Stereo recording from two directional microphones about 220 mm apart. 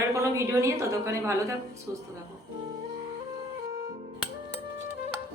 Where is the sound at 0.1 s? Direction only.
15° right (ahead or behind).